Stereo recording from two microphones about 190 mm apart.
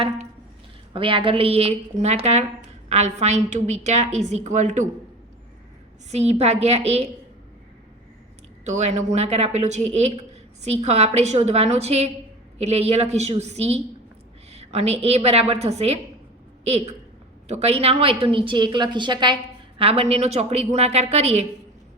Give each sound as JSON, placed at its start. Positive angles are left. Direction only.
{"t": 0.9, "sound": "a woman's voice", "side_deg": -25}
{"t": 6.1, "sound": "a woman's voice", "side_deg": -35}
{"t": 8.6, "sound": "a woman's voice", "side_deg": -35}